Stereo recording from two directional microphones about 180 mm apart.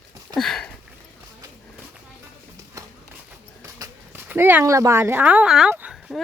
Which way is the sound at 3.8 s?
10° right (ahead or behind).